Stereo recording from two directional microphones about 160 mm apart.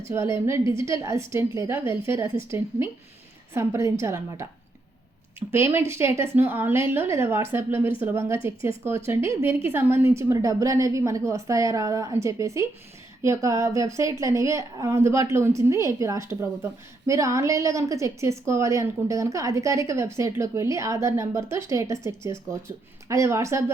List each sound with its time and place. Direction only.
0.0 s a woman's voice: 15° right (ahead or behind)
5.5 s a woman's voice: 15° right (ahead or behind)